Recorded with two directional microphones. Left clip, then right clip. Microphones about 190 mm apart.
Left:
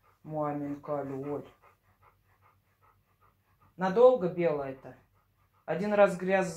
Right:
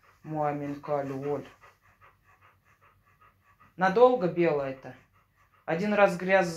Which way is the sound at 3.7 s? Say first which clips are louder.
Right 1 dB; 35° right (ahead or behind).